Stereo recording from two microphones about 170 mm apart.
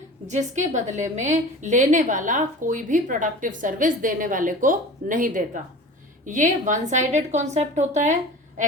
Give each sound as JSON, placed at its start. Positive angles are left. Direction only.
{"t": 0.3, "sound": "a woman's voice", "side_deg": -45}